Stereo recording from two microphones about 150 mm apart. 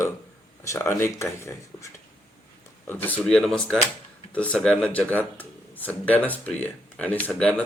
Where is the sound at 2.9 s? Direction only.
10° left (ahead or behind).